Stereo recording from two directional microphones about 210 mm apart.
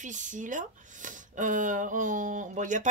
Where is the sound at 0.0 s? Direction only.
35° right (ahead or behind).